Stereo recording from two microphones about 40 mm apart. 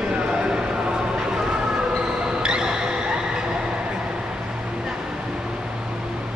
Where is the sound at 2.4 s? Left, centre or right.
Centre.